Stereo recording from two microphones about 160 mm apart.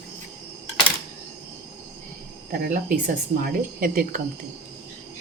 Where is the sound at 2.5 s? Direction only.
60° right (ahead or behind).